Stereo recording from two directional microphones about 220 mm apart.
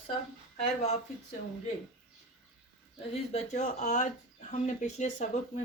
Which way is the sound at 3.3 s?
30° left (ahead or behind).